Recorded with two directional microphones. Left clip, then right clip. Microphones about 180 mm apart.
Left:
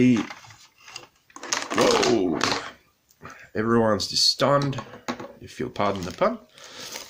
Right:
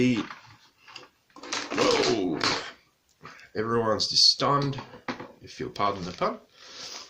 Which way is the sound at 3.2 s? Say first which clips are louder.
Left 4 dB; 45° left (ahead or behind).